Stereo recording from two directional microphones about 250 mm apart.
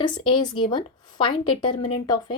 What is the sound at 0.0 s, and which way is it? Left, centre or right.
A woman's voice, centre.